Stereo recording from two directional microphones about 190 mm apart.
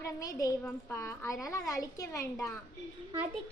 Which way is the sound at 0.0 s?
20° left (ahead or behind).